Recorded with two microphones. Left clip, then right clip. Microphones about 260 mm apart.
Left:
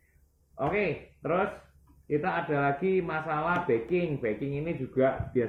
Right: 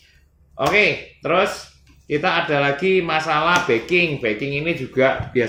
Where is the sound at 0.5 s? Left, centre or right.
Centre.